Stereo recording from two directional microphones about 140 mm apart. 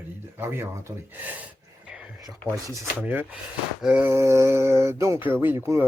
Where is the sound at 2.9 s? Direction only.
10° right (ahead or behind).